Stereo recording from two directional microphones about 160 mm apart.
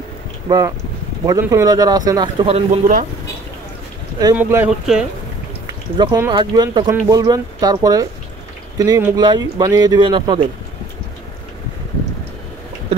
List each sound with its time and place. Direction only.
0.5 s speech: 20° right (ahead or behind)
2.4 s speech: 40° right (ahead or behind)
4.4 s speech: 15° right (ahead or behind)
4.6 s speech: 5° right (ahead or behind)
5.9 s speech: 30° right (ahead or behind)